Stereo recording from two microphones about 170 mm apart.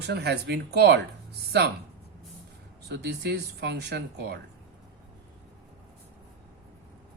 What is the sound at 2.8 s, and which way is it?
Speech, 80° right.